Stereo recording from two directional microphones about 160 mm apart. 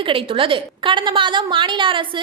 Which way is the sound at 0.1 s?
35° right (ahead or behind).